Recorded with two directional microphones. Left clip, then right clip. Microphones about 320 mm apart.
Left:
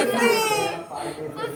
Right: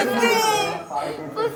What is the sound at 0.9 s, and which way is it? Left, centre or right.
Speech, right.